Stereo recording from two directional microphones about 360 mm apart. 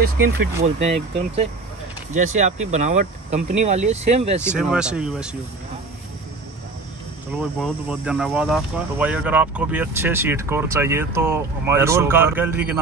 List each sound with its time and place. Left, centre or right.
0.6 s speech: centre
4.5 s speech: centre
7.6 s speech: centre